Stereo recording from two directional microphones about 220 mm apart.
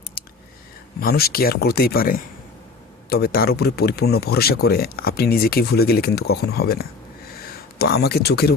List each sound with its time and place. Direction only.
0.9 s speech: 45° left (ahead or behind)